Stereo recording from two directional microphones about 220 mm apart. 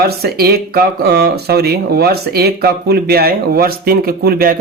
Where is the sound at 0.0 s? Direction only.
45° right (ahead or behind).